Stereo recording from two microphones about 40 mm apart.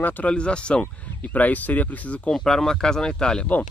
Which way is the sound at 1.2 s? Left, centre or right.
Left.